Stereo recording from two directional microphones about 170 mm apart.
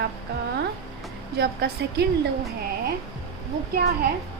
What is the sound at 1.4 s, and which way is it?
Speech, 70° right (ahead or behind).